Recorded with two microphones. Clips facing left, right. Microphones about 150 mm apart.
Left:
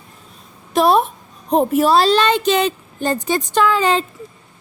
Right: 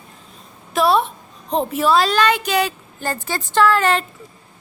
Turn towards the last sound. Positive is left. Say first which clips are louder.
# even
turn(degrees=15)  # may be behind; listen again after turning